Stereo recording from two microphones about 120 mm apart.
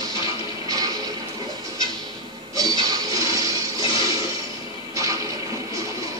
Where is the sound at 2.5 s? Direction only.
30° right (ahead or behind).